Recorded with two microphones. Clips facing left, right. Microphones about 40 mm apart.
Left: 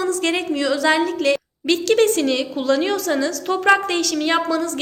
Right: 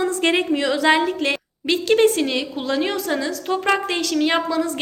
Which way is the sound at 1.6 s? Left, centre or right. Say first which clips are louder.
Even; centre.